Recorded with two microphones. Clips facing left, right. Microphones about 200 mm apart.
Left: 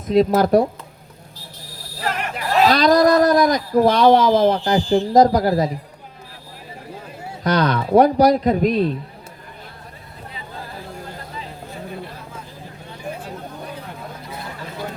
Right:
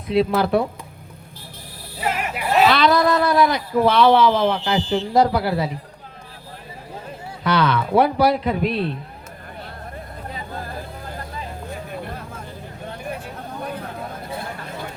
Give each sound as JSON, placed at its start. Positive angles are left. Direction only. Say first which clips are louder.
{"t": 0.1, "sound": "a man's voice", "louder": "left 4 dB", "side_deg": 40}
{"t": 2.0, "sound": "a sound", "louder": "right 1 dB", "side_deg": -5}
{"t": 2.6, "sound": "a man's voice", "louder": "left 5 dB", "side_deg": 40}
{"t": 7.4, "sound": "a man's voice", "louder": "left 1 dB", "side_deg": 40}
{"t": 12.0, "sound": "vehicle", "louder": "right 3 dB", "side_deg": -55}